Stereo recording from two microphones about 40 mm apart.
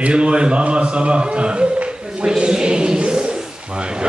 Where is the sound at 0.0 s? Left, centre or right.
Right.